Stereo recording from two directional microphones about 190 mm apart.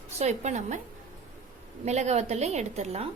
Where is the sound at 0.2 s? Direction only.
35° right (ahead or behind).